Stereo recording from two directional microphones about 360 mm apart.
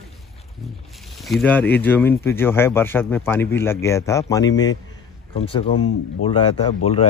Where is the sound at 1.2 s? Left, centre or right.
Centre.